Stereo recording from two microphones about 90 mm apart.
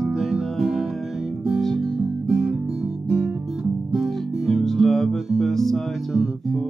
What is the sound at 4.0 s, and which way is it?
Music, centre (ahead or behind).